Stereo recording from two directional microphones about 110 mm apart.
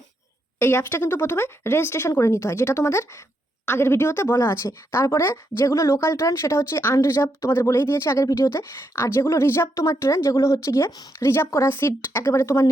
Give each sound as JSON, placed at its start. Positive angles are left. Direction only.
{"t": 0.6, "sound": "a woman's voice", "side_deg": 20}